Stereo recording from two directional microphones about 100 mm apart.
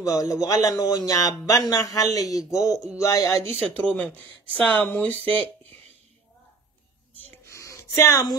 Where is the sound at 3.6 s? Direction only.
15° left (ahead or behind).